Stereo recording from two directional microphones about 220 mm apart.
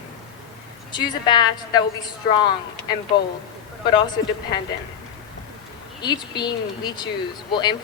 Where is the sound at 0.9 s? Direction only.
20° left (ahead or behind).